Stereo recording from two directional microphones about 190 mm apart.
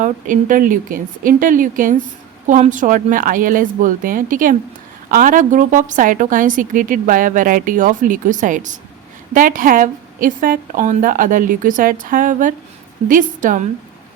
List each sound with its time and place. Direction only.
0.0 s a woman's voice: 45° right (ahead or behind)